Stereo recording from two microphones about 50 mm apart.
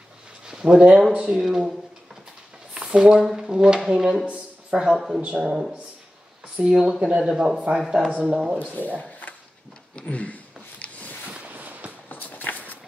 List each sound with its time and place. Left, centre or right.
0.5 s speech: centre
2.8 s speech: centre
4.3 s a sound: right
4.9 s speech: centre
8.1 s speech: right
8.7 s speech: left
9.2 s a sound: left
11.3 s a sound: right
12.1 s walk: left